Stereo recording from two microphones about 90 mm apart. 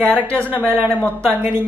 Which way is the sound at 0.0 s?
15° left (ahead or behind).